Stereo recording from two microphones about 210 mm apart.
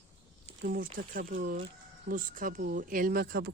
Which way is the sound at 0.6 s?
40° right (ahead or behind).